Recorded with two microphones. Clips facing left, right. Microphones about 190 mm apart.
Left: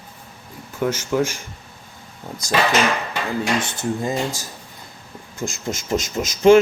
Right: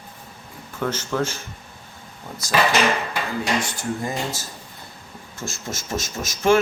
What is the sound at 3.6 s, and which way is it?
Speech, 20° left (ahead or behind).